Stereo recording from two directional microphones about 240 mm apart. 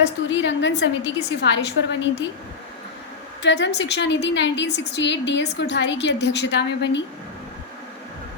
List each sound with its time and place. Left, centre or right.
0.3 s a woman's voice: left
3.4 s a woman's voice: left